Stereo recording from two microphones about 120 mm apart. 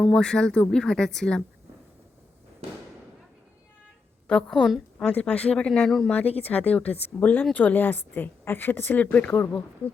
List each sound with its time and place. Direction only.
0.0 s a woman's voice: 5° left (ahead or behind)
4.3 s a woman's voice: 5° left (ahead or behind)